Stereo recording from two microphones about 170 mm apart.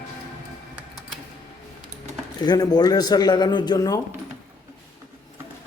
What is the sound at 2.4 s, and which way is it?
Speech, 25° left (ahead or behind).